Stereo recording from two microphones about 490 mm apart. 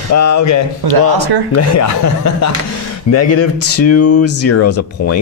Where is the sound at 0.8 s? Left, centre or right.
Right.